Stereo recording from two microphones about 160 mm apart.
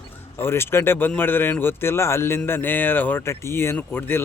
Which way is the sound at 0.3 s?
15° left (ahead or behind).